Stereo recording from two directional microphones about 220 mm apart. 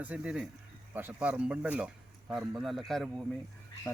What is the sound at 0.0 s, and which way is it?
Speech, 5° right (ahead or behind).